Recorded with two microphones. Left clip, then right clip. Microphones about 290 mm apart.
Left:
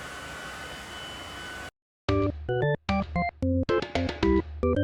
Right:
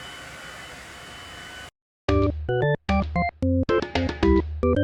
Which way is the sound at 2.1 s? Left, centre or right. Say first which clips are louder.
Right 4 dB; centre.